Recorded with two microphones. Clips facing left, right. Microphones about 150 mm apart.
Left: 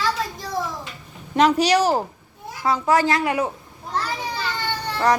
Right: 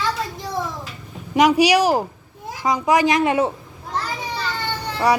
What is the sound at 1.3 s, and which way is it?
A woman's voice, 10° right (ahead or behind).